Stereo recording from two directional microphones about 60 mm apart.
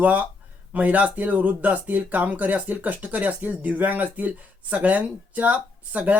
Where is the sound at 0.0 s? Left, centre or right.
Right.